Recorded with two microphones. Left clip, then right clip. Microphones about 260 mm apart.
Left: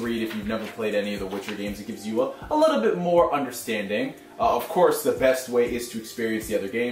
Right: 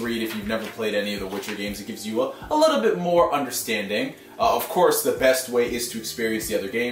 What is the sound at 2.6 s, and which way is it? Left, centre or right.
Speech, centre.